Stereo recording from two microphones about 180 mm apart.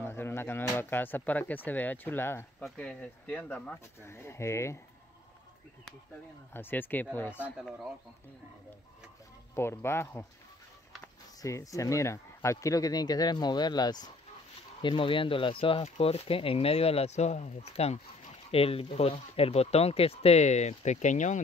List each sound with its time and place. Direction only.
0.0 s speech: 15° left (ahead or behind)
6.5 s speech: 10° left (ahead or behind)
7.3 s speech: 5° right (ahead or behind)
9.6 s speech: 15° left (ahead or behind)
11.4 s speech: 20° left (ahead or behind); by 21.4 s 40° left (ahead or behind)